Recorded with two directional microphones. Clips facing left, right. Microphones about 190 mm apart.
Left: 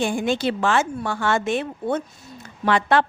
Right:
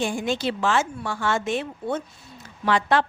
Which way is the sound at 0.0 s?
60° left (ahead or behind).